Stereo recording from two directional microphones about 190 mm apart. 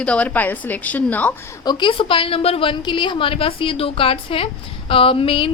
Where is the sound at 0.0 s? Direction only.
5° left (ahead or behind).